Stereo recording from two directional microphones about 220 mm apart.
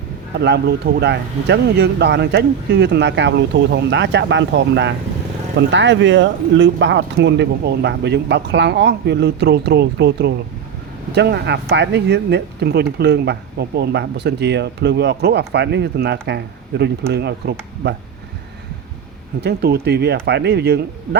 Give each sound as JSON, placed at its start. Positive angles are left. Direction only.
{"t": 0.3, "sound": "speech", "side_deg": -50}
{"t": 19.4, "sound": "speech", "side_deg": -45}